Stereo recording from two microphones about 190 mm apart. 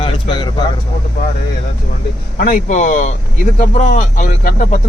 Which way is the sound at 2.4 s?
45° left (ahead or behind).